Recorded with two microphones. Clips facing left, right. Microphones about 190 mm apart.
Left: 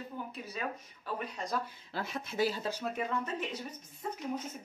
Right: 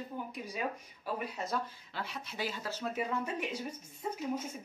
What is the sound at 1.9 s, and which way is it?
Speech, 50° left (ahead or behind).